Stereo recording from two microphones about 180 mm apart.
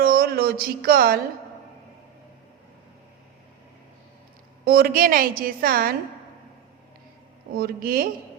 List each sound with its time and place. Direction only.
0.0 s a sound: 55° right (ahead or behind)
4.6 s a woman's voice: 55° right (ahead or behind)
7.5 s speech: 55° right (ahead or behind)